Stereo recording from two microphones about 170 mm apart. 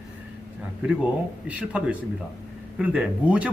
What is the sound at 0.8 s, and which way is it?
Speech, 10° right (ahead or behind).